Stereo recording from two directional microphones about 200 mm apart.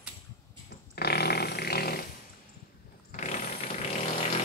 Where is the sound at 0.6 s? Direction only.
55° left (ahead or behind).